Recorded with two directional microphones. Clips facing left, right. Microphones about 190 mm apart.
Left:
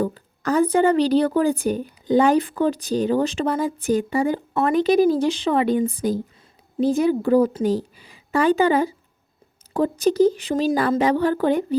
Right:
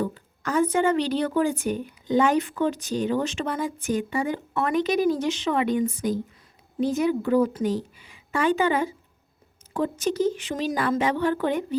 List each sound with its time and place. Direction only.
0.0 s a woman's voice: 35° left (ahead or behind)